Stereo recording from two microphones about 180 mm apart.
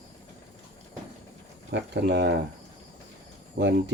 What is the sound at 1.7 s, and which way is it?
Speech, 70° right (ahead or behind).